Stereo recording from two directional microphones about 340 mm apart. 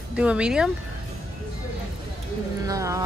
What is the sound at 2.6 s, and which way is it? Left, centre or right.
Carnatic music, centre.